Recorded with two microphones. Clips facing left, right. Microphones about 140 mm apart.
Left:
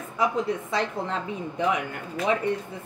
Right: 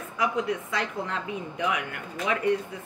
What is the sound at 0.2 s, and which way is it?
Speech, 30° left (ahead or behind).